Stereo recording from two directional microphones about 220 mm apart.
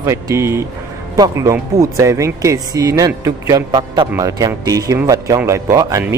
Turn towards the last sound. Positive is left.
turn(degrees=-15)  # may be behind; listen again after turning